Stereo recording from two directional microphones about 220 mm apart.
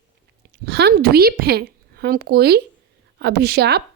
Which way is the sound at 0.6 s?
45° right (ahead or behind).